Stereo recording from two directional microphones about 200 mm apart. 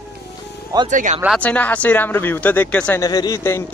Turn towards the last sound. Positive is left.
turn(degrees=15)  # may be behind; listen again after turning